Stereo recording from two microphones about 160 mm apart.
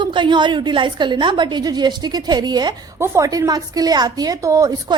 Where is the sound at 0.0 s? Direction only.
30° right (ahead or behind).